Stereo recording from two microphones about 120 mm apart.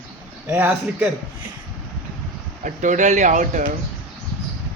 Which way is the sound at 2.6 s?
90° right.